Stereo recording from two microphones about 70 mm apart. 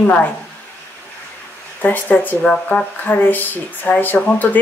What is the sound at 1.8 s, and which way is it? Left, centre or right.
A woman's voice, left.